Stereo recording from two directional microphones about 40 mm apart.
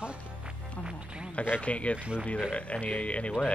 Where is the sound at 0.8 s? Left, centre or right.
Right.